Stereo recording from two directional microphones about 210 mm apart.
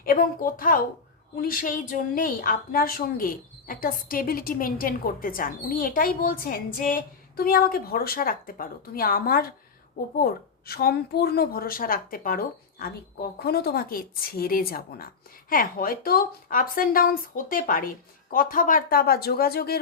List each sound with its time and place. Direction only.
0.0 s a woman's voice: 40° left (ahead or behind)
13.4 s a woman's voice: 50° left (ahead or behind)